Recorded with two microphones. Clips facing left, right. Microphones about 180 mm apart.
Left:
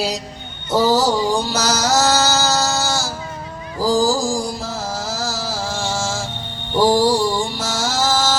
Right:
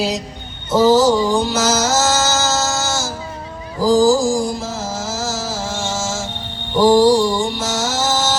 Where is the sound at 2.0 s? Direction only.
20° right (ahead or behind).